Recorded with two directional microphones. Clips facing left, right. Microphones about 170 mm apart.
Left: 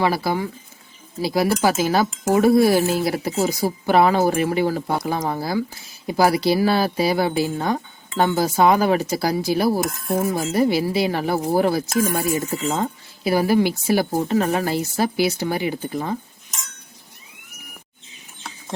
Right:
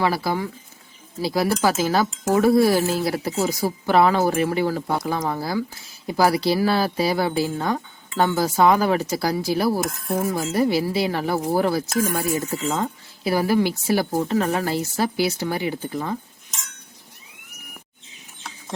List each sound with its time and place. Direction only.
0.0 s speech: 15° left (ahead or behind)